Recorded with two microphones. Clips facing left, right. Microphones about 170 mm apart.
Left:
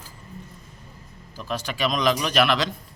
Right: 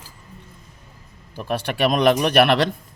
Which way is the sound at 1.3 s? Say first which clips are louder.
Right 5 dB; 60° right (ahead or behind).